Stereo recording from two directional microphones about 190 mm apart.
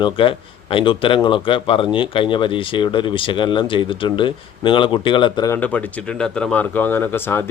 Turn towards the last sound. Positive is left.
turn(degrees=10)  # may be behind; listen again after turning